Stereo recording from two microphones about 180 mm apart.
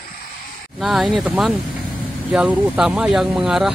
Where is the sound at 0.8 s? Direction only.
Centre (ahead or behind).